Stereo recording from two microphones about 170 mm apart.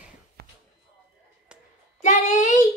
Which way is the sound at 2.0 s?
45° left (ahead or behind).